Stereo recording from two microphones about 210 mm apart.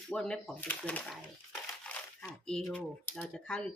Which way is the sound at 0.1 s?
5° left (ahead or behind).